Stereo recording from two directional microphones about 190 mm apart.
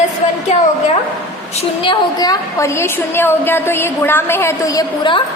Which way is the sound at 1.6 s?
25° left (ahead or behind).